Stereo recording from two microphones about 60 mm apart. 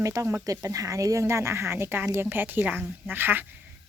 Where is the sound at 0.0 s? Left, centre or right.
Right.